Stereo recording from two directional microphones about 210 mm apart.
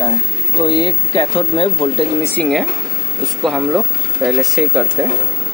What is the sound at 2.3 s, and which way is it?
Speech, centre (ahead or behind).